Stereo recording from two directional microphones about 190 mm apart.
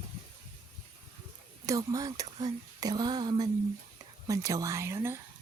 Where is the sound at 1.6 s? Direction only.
20° right (ahead or behind).